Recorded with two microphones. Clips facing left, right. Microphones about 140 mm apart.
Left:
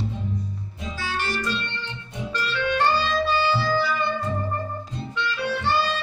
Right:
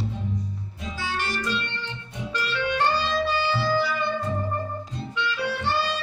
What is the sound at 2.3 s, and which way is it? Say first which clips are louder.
Music: left 1 dB; 15° right (ahead or behind).